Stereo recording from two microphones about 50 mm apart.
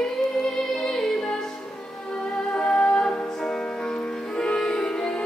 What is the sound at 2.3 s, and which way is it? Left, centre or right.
Music, centre.